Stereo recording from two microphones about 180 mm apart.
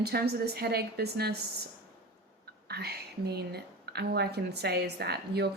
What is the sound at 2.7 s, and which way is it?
A woman's voice, 65° right (ahead or behind).